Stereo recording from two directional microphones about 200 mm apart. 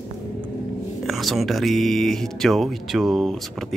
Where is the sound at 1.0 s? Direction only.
Centre (ahead or behind).